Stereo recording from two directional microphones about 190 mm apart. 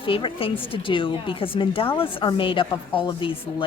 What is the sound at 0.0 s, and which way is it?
A woman's voice, 25° left (ahead or behind).